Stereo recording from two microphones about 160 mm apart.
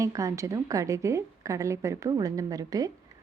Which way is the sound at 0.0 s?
20° right (ahead or behind).